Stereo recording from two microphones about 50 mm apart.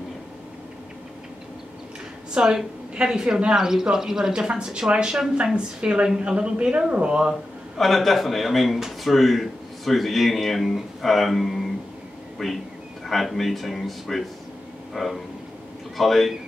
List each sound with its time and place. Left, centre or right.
2.3 s a woman's voice: centre
7.7 s speech: centre